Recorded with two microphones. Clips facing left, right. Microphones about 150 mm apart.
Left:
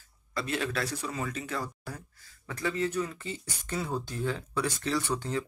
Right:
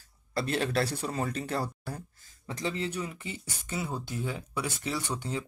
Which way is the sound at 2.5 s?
20° right (ahead or behind).